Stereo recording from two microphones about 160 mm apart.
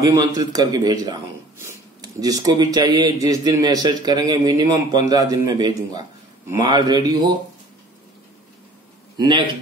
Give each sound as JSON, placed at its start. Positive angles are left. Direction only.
{"t": 0.0, "sound": "a man's voice", "side_deg": -25}
{"t": 9.1, "sound": "a man's voice", "side_deg": -25}